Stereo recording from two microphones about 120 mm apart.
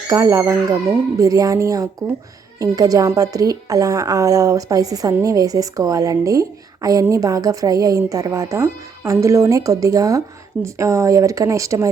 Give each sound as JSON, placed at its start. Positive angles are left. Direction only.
{"t": 0.1, "sound": "speech", "side_deg": -30}